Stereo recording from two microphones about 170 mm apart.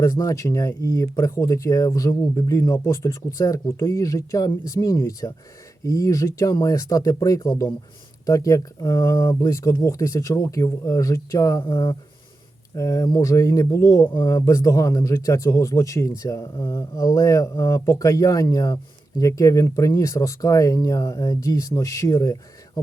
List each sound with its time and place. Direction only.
0.0 s speech: 15° left (ahead or behind)